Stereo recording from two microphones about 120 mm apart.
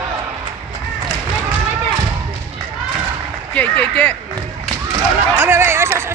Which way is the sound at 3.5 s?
10° left (ahead or behind).